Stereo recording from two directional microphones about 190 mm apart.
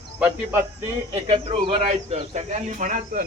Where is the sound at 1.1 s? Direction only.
25° right (ahead or behind).